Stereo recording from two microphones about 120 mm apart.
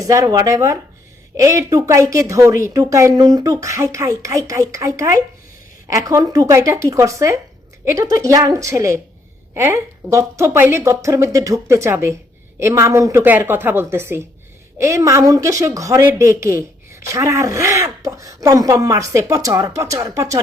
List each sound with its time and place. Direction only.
0.0 s speech: 30° right (ahead or behind)